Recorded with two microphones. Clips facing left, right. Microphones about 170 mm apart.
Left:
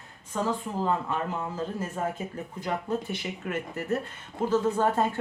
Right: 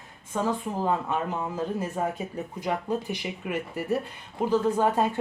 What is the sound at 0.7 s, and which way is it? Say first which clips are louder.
Speech: even; 15° right (ahead or behind).